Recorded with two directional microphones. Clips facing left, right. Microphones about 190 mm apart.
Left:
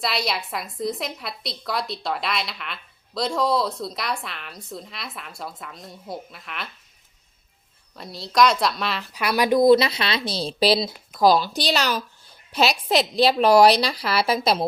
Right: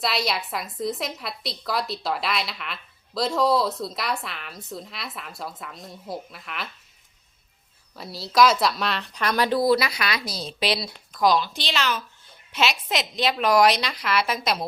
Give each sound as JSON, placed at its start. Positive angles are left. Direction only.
{"t": 0.0, "sound": "a woman's voice", "side_deg": 0}
{"t": 7.9, "sound": "a woman's voice", "side_deg": 0}